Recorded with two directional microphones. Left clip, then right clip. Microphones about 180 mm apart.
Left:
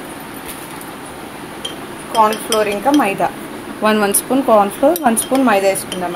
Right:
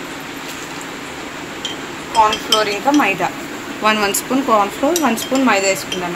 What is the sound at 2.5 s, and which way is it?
A woman's voice, 35° left (ahead or behind).